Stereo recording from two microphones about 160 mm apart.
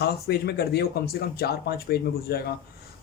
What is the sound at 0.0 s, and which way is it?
Speech, 80° left.